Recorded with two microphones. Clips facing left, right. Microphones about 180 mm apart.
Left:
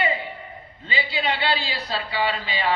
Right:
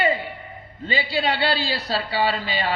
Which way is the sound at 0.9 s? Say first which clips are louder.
Right 3 dB; 40° right (ahead or behind).